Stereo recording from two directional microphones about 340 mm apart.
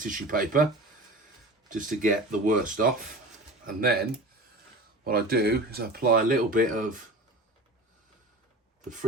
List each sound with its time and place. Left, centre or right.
0.0 s speech: right
1.7 s speech: right
5.0 s speech: right